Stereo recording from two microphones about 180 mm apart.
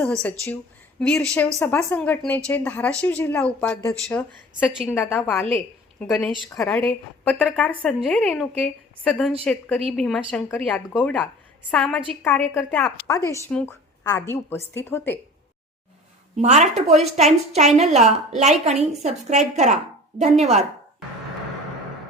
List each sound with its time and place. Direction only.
0.0 s speech: 5° left (ahead or behind)
4.9 s a woman's voice: 10° left (ahead or behind)
16.4 s a woman's voice: 40° right (ahead or behind)